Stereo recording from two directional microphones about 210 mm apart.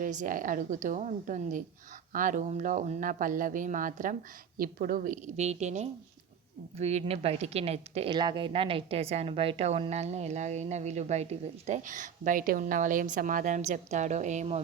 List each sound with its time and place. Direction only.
0.0 s a woman's voice: 35° right (ahead or behind)